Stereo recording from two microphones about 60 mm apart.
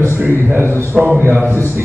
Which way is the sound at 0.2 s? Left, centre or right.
Right.